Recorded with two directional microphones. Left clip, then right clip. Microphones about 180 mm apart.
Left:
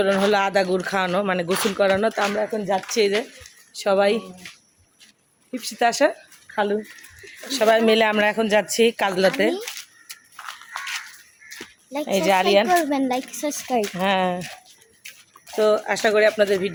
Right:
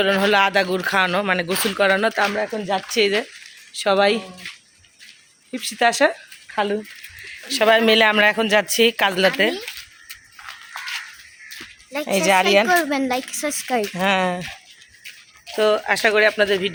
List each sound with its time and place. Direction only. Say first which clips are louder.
0.0 s speech: right 2 dB; centre (ahead or behind)
2.9 s speech: right 3 dB; 15° right (ahead or behind)
5.5 s speech: right 2 dB; 20° right (ahead or behind); by 9.3 s centre (ahead or behind)
9.4 s a sound: right 2 dB; centre (ahead or behind)
12.0 s speech: right 2 dB; 20° right (ahead or behind)
12.6 s speech: right 1 dB; 5° left (ahead or behind)
13.9 s speech: right 3 dB; 20° right (ahead or behind)
15.5 s speech: right 1 dB; centre (ahead or behind)